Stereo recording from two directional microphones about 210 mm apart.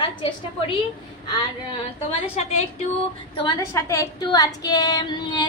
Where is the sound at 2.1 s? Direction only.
30° left (ahead or behind).